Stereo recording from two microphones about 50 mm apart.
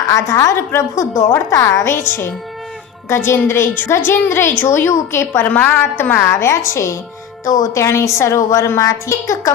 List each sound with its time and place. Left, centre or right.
0.1 s a woman's voice: left
0.7 s a woman's voice: left
2.0 s a woman's voice: left
4.9 s a woman's voice: left
5.4 s a woman's voice: left
5.6 s a woman's voice: left
6.2 s a woman's voice: left